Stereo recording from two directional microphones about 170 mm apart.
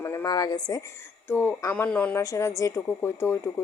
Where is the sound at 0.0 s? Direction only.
15° left (ahead or behind).